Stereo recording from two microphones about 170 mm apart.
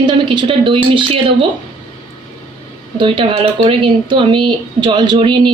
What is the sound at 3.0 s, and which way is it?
A woman's voice, 30° right (ahead or behind).